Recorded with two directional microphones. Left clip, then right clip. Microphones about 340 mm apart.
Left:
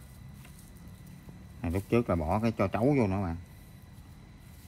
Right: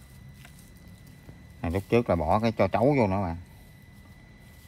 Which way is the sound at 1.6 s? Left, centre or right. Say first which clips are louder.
Right 4 dB; right.